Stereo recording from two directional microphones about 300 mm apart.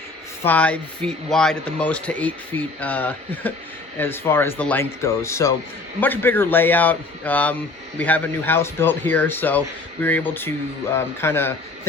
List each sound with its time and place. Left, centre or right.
0.4 s speech: centre